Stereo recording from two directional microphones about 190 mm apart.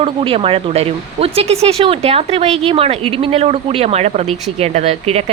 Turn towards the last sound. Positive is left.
turn(degrees=-35)  # may be behind; listen again after turning